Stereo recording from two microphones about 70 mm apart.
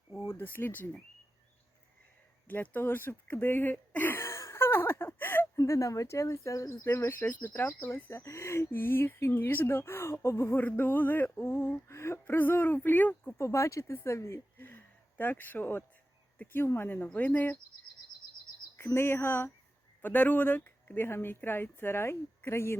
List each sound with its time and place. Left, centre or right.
0.3 s speech: left
2.5 s speech: left
5.5 s speech: left
6.8 s speech: left
13.4 s speech: left
14.6 s speech: left
18.8 s speech: left